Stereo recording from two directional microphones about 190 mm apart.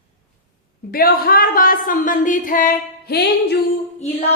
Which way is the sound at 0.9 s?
50° left (ahead or behind).